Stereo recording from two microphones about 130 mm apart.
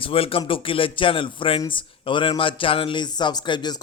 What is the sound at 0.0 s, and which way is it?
A man's voice, 45° left (ahead or behind).